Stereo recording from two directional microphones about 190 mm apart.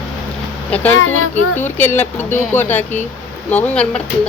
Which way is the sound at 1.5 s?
10° left (ahead or behind).